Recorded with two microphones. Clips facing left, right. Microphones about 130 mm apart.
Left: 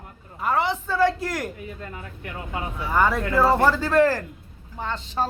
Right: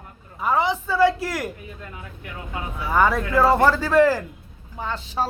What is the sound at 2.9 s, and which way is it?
Speech, 10° right (ahead or behind).